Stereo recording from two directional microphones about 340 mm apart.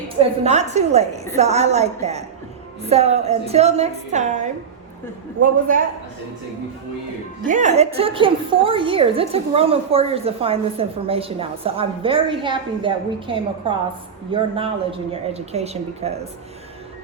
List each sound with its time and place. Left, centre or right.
0.2 s a woman's voice: centre
7.4 s a woman's voice: right